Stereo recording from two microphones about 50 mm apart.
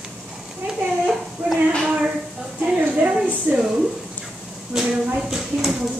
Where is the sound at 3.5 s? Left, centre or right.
Right.